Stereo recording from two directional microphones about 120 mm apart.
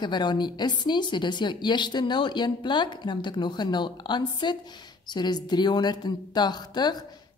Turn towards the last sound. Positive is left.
turn(degrees=35)  # may be behind; listen again after turning